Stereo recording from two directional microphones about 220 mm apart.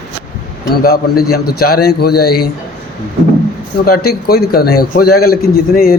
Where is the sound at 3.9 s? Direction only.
45° left (ahead or behind).